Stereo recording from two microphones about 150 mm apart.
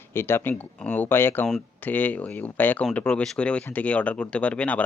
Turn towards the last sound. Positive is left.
turn(degrees=10)  # may be behind; listen again after turning